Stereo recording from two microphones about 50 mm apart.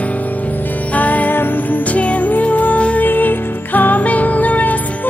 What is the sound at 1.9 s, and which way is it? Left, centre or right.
Music, left.